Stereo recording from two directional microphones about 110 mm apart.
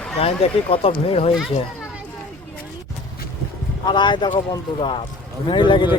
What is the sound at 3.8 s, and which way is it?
Speech, 45° left (ahead or behind).